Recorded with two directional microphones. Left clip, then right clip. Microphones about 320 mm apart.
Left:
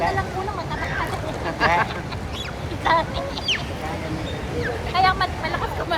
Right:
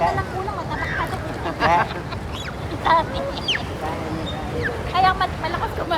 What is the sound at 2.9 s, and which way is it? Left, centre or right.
Duck, centre.